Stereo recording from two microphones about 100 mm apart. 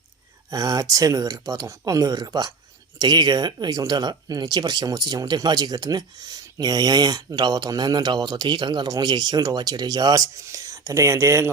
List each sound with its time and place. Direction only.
0.5 s speech: 35° right (ahead or behind)